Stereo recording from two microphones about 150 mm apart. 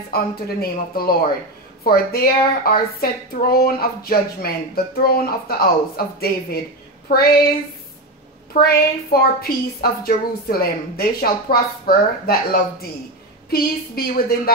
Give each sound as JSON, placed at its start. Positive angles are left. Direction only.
{"t": 0.1, "sound": "a woman's voice", "side_deg": 90}
{"t": 8.5, "sound": "a woman's voice", "side_deg": 90}